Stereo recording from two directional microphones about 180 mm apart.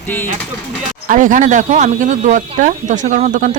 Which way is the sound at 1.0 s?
45° right (ahead or behind).